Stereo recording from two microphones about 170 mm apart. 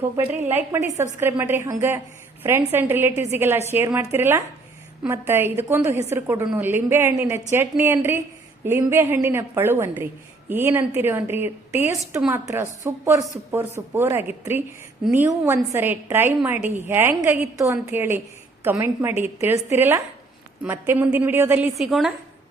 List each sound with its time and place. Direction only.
0.2 s a woman's voice: 15° right (ahead or behind)